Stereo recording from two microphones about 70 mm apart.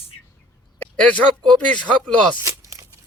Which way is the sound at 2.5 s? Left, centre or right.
Right.